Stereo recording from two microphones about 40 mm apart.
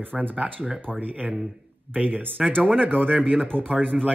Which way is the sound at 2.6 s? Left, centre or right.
Right.